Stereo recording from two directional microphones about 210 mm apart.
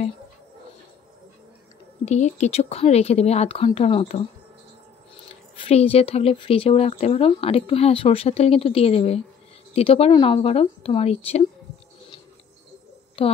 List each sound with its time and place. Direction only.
2.0 s speech: 35° left (ahead or behind)
5.6 s speech: 30° left (ahead or behind)